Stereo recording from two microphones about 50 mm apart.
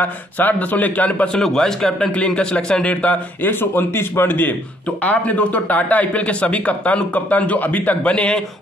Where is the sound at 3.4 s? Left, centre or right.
Left.